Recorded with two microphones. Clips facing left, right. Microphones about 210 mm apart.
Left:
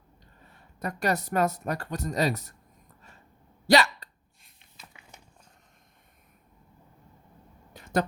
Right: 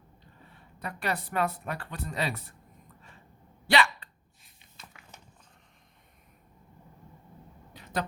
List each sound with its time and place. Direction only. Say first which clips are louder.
0.5 s speech: left 5 dB; 45° left (ahead or behind)
3.7 s hiccup: left 4 dB; 40° left (ahead or behind)
7.7 s a sound: left 6 dB; 45° left (ahead or behind)